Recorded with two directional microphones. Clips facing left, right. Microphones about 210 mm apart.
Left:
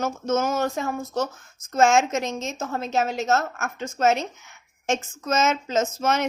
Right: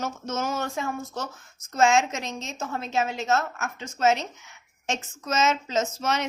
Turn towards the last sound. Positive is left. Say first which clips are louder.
# left 3 dB
turn(degrees=50)  # may be behind; listen again after turning